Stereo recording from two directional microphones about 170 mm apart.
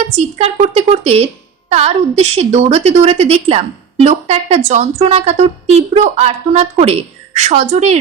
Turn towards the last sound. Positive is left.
turn(degrees=-40)  # may be behind; listen again after turning